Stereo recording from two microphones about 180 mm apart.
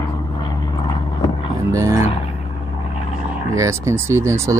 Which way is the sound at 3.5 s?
15° right (ahead or behind).